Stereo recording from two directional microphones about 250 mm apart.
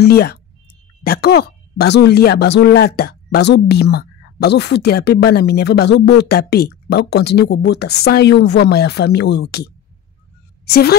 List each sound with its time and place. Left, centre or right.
0.0 s a woman's voice: left